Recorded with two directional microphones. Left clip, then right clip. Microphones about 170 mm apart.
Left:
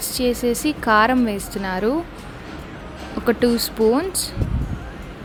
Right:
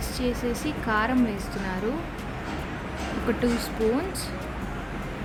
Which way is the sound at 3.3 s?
40° left (ahead or behind).